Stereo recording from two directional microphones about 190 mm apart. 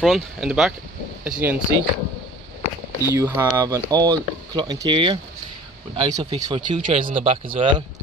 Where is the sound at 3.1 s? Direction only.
15° right (ahead or behind).